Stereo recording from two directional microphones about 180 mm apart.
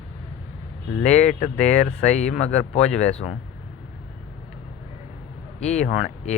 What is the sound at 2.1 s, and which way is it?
Speech, 40° left (ahead or behind).